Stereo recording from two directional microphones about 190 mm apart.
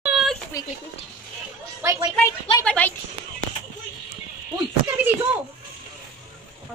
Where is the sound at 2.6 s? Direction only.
5° left (ahead or behind).